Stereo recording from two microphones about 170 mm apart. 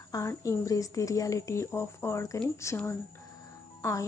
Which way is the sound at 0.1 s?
20° left (ahead or behind).